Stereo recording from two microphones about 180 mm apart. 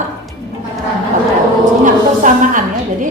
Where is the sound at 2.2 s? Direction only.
45° right (ahead or behind).